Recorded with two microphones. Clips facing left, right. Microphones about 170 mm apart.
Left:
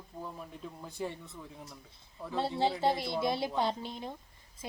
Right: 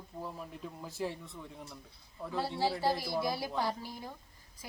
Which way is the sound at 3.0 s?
25° left (ahead or behind).